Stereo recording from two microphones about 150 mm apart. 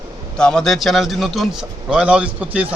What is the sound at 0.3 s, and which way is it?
A man's voice, 5° left (ahead or behind).